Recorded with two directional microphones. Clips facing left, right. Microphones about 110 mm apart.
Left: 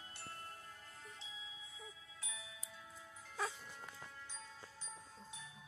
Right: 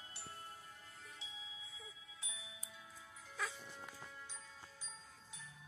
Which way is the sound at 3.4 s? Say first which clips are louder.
Left 2 dB; 30° left (ahead or behind).